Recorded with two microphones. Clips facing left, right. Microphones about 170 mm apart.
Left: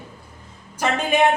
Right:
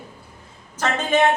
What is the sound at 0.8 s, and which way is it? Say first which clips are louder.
Speech: even; 10° left (ahead or behind).